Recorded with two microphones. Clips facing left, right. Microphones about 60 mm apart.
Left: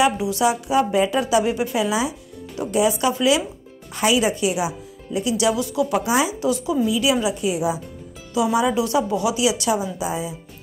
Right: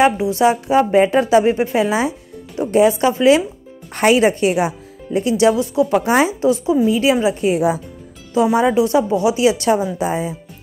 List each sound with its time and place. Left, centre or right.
0.0 s a woman's voice: right
3.9 s a woman's voice: right
6.5 s a woman's voice: right
8.5 s a woman's voice: right